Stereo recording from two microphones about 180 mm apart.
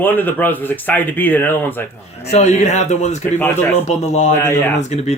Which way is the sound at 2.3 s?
40° left (ahead or behind).